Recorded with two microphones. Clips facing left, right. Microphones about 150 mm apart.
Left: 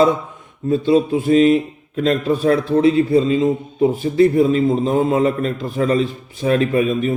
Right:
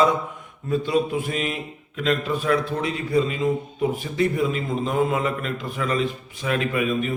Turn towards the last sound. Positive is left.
turn(degrees=35)  # may be behind; listen again after turning